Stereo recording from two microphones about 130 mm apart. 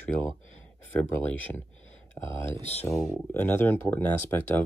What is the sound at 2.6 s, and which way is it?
Speech, 55° left (ahead or behind).